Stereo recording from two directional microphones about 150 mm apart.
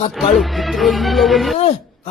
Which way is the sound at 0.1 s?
Centre (ahead or behind).